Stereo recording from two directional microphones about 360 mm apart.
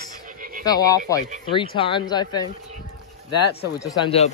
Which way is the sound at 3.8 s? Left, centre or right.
Centre.